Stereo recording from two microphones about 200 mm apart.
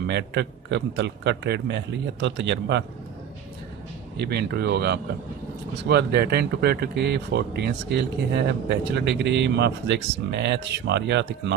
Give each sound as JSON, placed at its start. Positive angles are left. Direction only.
{"t": 0.1, "sound": "speech", "side_deg": -60}
{"t": 4.2, "sound": "speech", "side_deg": -55}